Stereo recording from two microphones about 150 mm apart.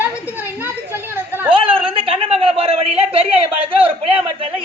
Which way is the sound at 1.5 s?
35° right (ahead or behind).